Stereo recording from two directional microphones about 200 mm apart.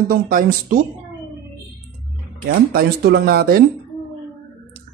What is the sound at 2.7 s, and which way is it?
Speech, 50° right (ahead or behind).